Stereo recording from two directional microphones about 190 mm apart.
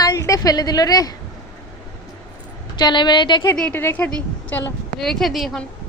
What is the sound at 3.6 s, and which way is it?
A child's voice, 10° left (ahead or behind).